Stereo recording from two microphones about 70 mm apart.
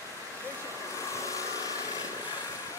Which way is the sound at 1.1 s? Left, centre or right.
Left.